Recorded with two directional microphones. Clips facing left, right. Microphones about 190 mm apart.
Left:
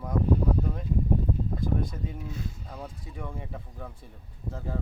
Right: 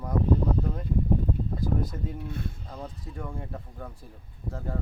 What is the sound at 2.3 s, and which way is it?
Speech, 55° right (ahead or behind).